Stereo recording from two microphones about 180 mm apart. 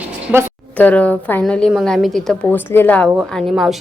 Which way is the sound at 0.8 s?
10° left (ahead or behind).